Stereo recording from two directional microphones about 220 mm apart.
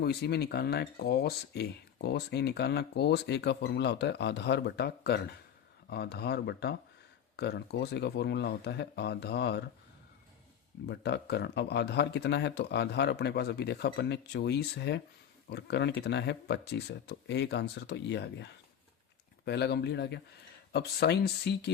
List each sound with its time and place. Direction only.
0.0 s speech: 45° left (ahead or behind)
10.8 s speech: 50° left (ahead or behind)